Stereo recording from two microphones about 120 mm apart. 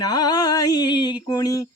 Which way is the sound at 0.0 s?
35° left (ahead or behind).